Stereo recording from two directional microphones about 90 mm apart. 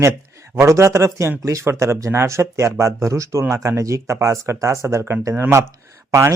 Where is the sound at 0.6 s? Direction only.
35° right (ahead or behind).